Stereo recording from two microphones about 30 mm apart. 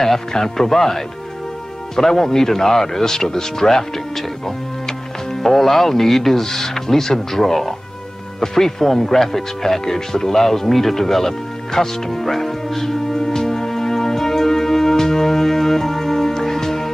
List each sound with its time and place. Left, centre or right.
0.3 s speech: centre
13.1 s music: centre